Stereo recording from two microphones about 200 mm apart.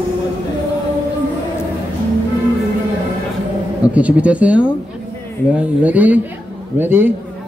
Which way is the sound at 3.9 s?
5° right (ahead or behind).